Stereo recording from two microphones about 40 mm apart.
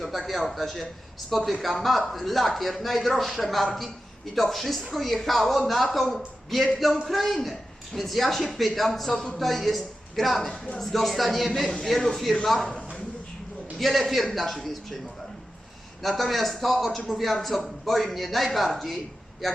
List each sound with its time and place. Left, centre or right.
0.0 s a man's voice: centre
12.5 s a sound: centre
13.7 s speech: centre
16.0 s speech: centre